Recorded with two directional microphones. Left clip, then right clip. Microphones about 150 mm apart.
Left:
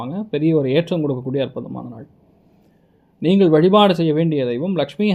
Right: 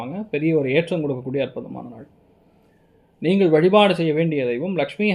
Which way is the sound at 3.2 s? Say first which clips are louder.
Left 2 dB; 30° left (ahead or behind).